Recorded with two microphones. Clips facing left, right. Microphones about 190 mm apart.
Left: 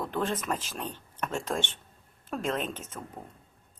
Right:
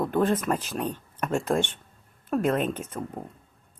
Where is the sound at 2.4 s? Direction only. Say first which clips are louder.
Right 7 dB; 50° right (ahead or behind).